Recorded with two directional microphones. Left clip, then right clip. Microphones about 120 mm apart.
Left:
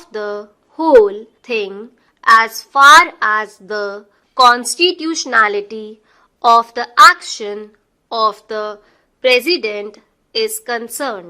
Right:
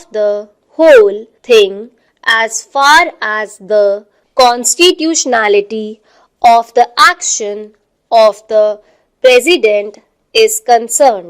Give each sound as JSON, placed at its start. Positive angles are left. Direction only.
{"t": 0.0, "sound": "a woman's voice", "side_deg": -20}
{"t": 6.5, "sound": "a woman's voice", "side_deg": -25}